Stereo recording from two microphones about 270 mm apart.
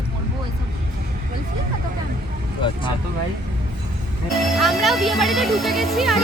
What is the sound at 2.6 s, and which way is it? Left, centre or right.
Speech, centre.